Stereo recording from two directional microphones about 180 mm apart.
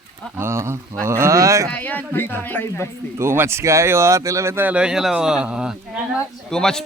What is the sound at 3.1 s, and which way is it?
Speech, 15° right (ahead or behind).